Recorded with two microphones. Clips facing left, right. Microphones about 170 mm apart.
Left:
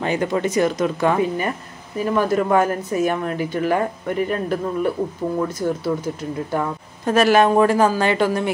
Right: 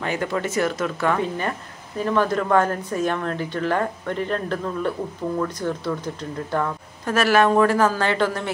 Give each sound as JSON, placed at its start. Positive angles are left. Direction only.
{"t": 0.0, "sound": "speech", "side_deg": 20}